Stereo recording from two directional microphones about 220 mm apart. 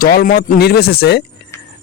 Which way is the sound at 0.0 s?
40° left (ahead or behind).